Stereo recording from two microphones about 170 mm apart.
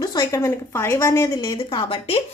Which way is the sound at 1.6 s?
30° left (ahead or behind).